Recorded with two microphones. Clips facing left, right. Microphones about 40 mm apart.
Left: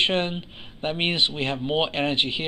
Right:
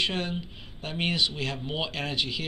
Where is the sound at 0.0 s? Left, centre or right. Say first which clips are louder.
Left 6 dB; left.